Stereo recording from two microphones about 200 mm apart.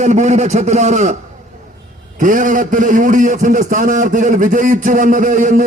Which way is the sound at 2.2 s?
40° right (ahead or behind).